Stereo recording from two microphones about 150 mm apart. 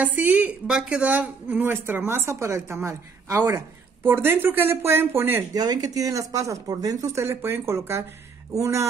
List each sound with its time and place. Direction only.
0.0 s a woman's voice: 10° right (ahead or behind)
5.5 s speech: 25° right (ahead or behind)